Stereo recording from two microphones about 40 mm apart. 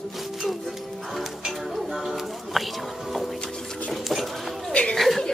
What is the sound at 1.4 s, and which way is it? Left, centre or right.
Music, centre.